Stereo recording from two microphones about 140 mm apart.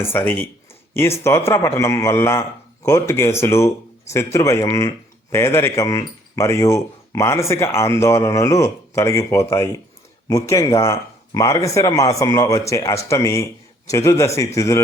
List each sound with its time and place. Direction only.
0.0 s a man's voice: 15° left (ahead or behind)